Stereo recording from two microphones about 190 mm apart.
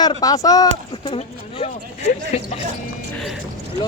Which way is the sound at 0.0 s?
20° left (ahead or behind).